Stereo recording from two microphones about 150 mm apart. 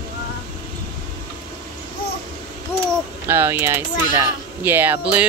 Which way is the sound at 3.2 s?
15° right (ahead or behind).